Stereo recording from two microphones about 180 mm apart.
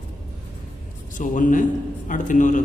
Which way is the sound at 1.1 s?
45° left (ahead or behind).